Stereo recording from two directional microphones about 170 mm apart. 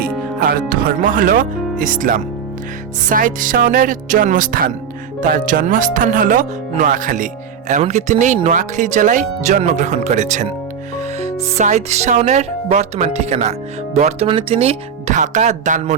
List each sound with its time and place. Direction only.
0.0 s speech: 60° right (ahead or behind)
11.5 s speech: 40° right (ahead or behind)